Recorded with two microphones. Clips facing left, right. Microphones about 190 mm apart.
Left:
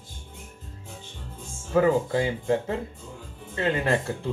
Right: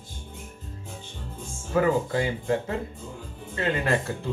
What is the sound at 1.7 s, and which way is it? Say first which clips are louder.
Speech: left 2 dB; 25° left (ahead or behind).